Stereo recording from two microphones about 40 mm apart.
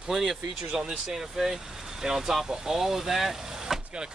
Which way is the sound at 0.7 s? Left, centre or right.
Centre.